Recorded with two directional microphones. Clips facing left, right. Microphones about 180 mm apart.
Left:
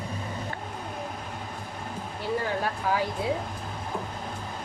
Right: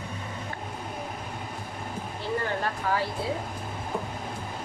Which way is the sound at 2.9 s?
10° left (ahead or behind).